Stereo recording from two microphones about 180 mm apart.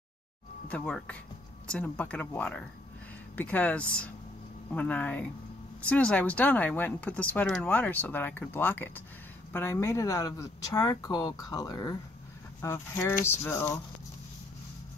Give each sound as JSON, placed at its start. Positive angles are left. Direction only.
{"t": 0.7, "sound": "speech", "side_deg": 5}